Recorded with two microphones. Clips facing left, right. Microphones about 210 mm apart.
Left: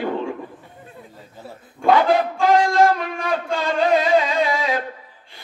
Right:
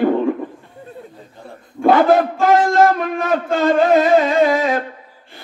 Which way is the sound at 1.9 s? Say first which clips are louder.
Right 3 dB; 50° right (ahead or behind).